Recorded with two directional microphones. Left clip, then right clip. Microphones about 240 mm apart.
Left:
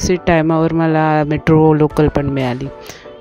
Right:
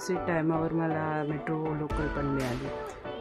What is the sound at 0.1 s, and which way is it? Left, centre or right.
Speech, left.